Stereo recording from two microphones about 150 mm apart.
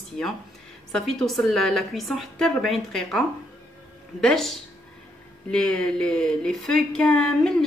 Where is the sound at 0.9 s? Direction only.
Centre (ahead or behind).